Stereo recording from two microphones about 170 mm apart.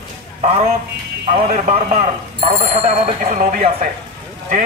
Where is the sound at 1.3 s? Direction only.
50° right (ahead or behind).